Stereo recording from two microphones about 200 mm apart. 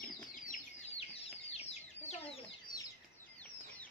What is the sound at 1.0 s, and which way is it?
Chicken, 30° left (ahead or behind).